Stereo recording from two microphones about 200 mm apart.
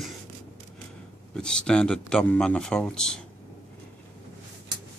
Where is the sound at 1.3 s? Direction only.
5° left (ahead or behind).